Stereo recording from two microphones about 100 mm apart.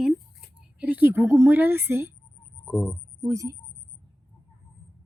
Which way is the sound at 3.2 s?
35° right (ahead or behind).